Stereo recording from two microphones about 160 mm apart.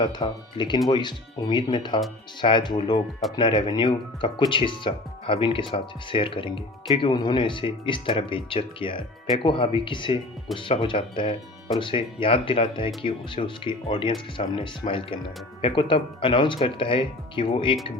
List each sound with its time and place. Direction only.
0.0 s speech: 30° left (ahead or behind)